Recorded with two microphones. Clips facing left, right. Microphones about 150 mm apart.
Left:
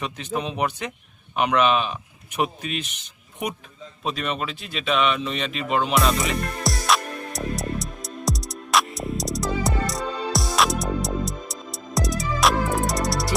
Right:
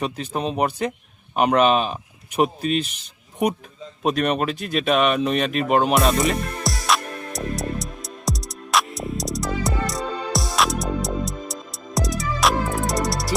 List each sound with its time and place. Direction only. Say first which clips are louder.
0.0 s speech: right 3 dB; 40° right (ahead or behind)
4.0 s speech: right 7 dB; 50° right (ahead or behind)
6.2 s music: right 2 dB; centre (ahead or behind)